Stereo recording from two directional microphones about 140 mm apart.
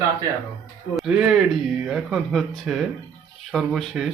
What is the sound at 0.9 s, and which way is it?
Speech, 5° right (ahead or behind).